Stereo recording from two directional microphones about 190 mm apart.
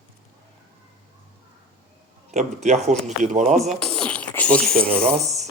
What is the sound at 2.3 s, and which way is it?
Speech, 35° right (ahead or behind).